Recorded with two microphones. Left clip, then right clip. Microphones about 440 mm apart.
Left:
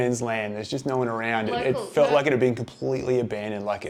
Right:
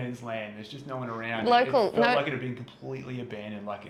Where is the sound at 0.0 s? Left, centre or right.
Left.